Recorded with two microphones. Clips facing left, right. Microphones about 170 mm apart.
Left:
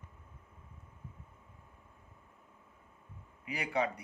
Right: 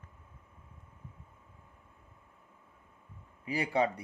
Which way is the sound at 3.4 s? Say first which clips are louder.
Right 4 dB; 30° right (ahead or behind).